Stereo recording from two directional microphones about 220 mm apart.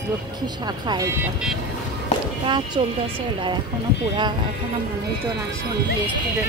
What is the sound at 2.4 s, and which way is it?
Speech, 20° right (ahead or behind).